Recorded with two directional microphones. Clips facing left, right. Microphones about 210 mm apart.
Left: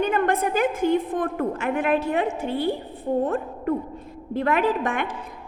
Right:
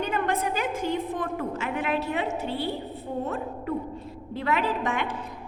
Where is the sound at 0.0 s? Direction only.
55° left (ahead or behind).